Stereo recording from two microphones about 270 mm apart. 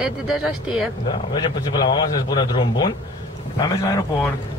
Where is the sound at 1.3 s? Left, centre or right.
Centre.